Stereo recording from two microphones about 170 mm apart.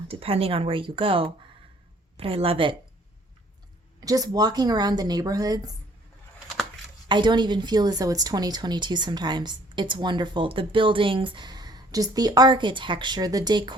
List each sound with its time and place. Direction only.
0.1 s speech: 35° right (ahead or behind)
4.0 s speech: 20° right (ahead or behind)
7.1 s speech: 25° right (ahead or behind)